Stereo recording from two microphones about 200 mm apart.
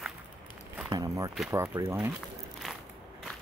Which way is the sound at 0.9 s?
15° right (ahead or behind).